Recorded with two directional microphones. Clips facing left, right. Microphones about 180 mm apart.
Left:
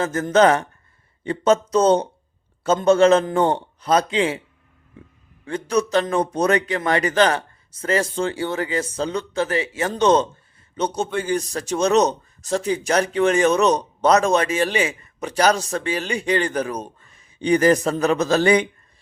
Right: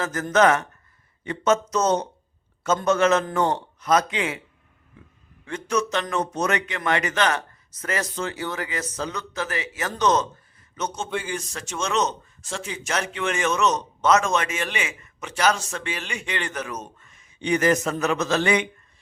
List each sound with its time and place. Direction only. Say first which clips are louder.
0.0 s a man's voice: left 3 dB; 30° left (ahead or behind)
5.5 s a man's voice: left 4 dB; 35° left (ahead or behind)